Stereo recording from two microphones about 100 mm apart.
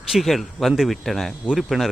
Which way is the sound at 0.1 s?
Centre (ahead or behind).